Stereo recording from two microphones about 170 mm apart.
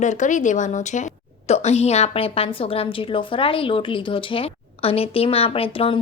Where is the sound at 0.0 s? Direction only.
45° left (ahead or behind).